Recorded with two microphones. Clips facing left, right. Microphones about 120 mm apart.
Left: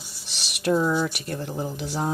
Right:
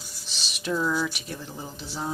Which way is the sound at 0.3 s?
65° left (ahead or behind).